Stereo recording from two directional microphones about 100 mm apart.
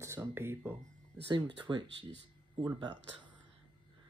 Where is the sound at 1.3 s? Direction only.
50° right (ahead or behind).